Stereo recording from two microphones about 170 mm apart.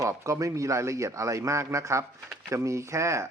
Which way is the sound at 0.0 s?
20° right (ahead or behind).